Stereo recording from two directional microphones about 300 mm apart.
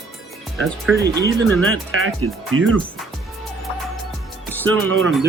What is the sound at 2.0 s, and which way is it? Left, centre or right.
Speech, right.